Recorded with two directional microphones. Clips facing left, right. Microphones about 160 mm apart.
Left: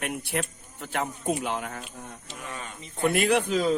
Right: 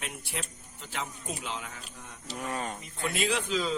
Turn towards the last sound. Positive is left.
turn(degrees=50)  # may be behind; listen again after turning